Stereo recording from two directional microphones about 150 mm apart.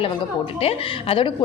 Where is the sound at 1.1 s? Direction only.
35° left (ahead or behind).